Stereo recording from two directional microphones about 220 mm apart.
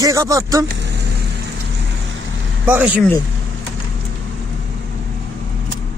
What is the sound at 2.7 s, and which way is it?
Speech, 5° right (ahead or behind).